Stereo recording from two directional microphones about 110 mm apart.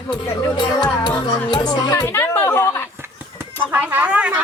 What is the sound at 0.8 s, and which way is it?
Music, 45° left (ahead or behind).